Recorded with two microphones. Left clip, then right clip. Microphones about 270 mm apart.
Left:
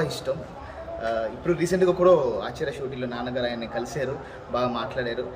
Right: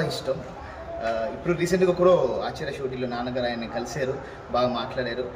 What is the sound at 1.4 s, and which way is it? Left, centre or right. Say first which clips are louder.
A man's voice: even; centre.